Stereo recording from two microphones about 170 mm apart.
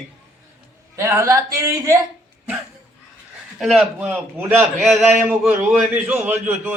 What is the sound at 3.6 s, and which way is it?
A man's voice, centre (ahead or behind).